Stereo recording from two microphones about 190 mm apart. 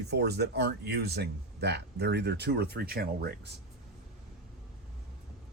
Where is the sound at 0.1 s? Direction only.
60° right (ahead or behind).